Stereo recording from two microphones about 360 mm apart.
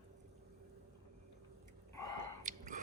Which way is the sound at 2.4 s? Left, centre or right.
Right.